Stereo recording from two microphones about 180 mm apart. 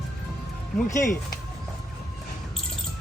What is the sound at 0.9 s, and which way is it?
Speech, 15° left (ahead or behind).